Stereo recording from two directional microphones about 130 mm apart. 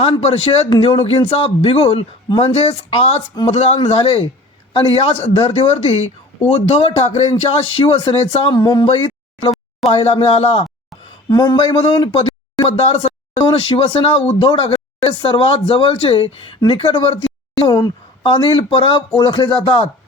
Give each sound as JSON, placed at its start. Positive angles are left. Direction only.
{"t": 0.0, "sound": "speech", "side_deg": 50}
{"t": 8.5, "sound": "speech", "side_deg": 35}
{"t": 11.3, "sound": "a woman's voice", "side_deg": 35}